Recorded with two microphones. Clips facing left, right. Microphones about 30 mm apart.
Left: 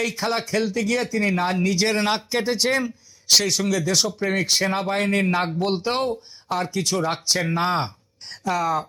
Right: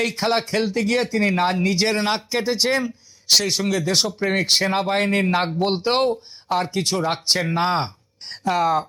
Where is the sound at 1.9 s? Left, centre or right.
Centre.